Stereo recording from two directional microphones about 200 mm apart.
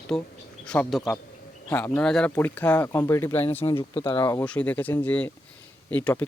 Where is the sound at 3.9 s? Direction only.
25° left (ahead or behind).